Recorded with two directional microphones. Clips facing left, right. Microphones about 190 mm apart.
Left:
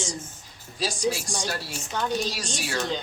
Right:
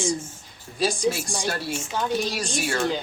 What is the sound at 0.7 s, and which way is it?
A woman's voice, 55° right (ahead or behind).